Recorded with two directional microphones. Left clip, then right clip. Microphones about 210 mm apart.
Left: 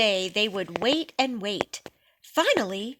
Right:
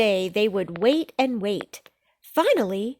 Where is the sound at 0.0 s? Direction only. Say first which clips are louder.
Right 2 dB; 55° right (ahead or behind).